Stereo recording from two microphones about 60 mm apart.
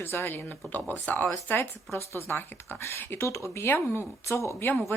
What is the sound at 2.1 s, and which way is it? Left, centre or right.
Speech, left.